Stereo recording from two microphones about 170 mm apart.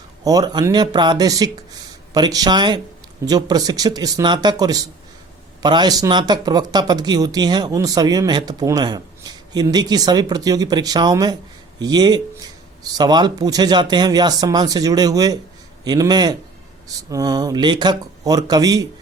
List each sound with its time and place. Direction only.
0.3 s speech: 25° right (ahead or behind)